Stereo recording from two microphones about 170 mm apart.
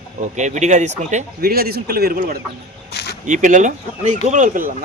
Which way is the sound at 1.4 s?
65° right (ahead or behind).